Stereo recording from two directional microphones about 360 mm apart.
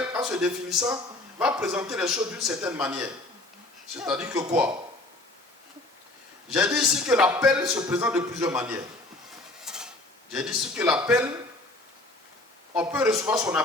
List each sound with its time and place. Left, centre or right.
0.1 s a man's voice: centre
6.5 s a man's voice: centre
9.6 s mechanisms: centre
10.3 s a man's voice: centre
12.7 s a man's voice: centre